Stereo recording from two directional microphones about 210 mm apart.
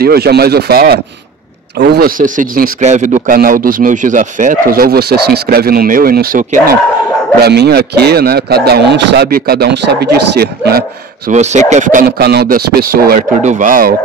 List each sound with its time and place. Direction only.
0.0 s speech: 50° right (ahead or behind)
11.2 s speech: 35° right (ahead or behind)